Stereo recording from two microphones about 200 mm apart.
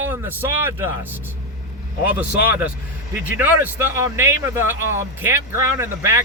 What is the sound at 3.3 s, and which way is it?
A man's voice, 10° right (ahead or behind).